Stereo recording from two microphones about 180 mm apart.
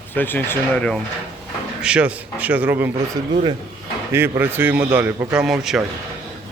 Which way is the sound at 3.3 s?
25° right (ahead or behind).